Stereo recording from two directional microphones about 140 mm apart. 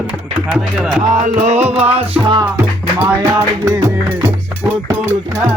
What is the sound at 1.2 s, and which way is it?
Music, 55° right (ahead or behind).